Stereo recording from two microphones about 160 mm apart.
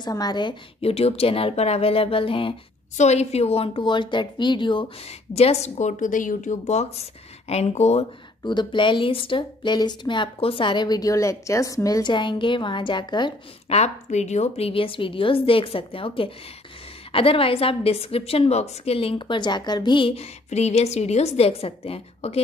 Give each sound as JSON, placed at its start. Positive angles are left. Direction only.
{"t": 0.0, "sound": "a woman's voice", "side_deg": 25}
{"t": 8.5, "sound": "a woman's voice", "side_deg": 30}
{"t": 13.7, "sound": "a woman's voice", "side_deg": 45}